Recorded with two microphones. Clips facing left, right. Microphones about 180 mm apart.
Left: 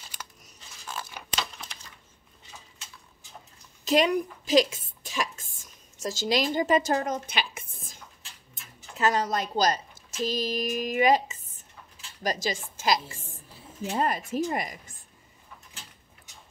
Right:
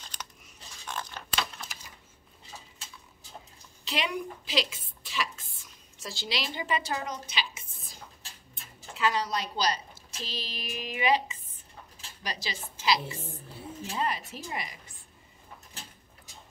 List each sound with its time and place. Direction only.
0.0 s tearing: 10° left (ahead or behind)
0.8 s a sound: 5° left (ahead or behind)
3.8 s a woman's voice: 45° left (ahead or behind)